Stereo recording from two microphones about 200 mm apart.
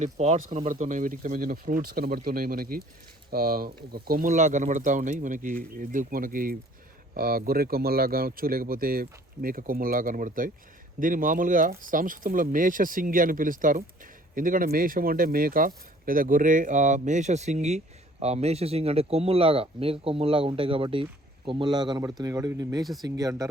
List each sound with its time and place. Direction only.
0.0 s speech: 35° right (ahead or behind); by 22.8 s 15° right (ahead or behind)
22.8 s speech: centre (ahead or behind)
23.0 s speech: 20° right (ahead or behind)